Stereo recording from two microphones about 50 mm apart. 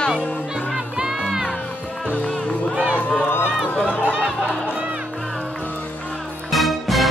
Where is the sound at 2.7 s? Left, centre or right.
Right.